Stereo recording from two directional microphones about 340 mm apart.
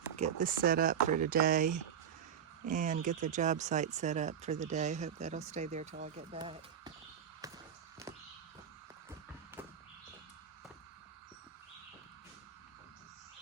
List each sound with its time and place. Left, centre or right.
0.2 s speech: right